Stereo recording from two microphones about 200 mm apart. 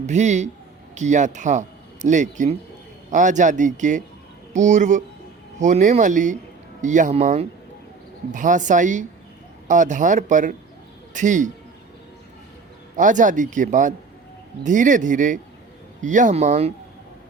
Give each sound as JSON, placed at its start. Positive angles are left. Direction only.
{"t": 0.0, "sound": "a man's voice", "side_deg": -35}
{"t": 13.0, "sound": "speech", "side_deg": -40}